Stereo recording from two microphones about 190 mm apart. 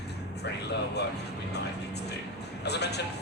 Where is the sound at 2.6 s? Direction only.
60° left (ahead or behind).